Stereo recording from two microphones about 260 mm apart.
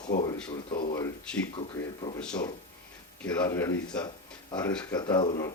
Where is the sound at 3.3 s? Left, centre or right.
Centre.